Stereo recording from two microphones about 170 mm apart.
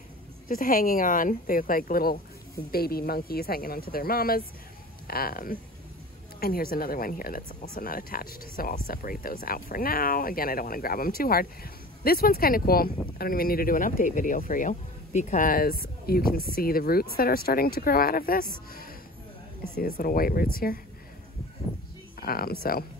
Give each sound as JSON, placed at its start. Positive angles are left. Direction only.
{"t": 0.5, "sound": "speech", "side_deg": 55}
{"t": 19.8, "sound": "speech", "side_deg": 60}
{"t": 22.2, "sound": "speech", "side_deg": 60}